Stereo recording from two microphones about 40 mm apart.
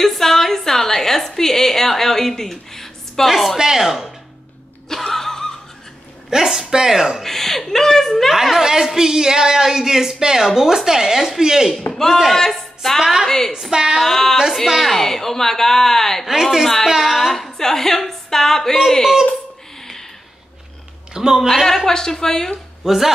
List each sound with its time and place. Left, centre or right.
0.0 s a woman's voice: centre
3.3 s a woman's voice: centre
4.8 s a sound: centre
6.3 s a woman's voice: centre
7.2 s a woman's voice: centre
8.3 s a woman's voice: centre
11.9 s speech: centre
13.0 s a woman's voice: centre
14.0 s a woman's voice: centre
16.3 s a woman's voice: centre
19.8 s a sound: centre
21.1 s speech: centre
21.6 s a woman's voice: centre
22.8 s a man's voice: centre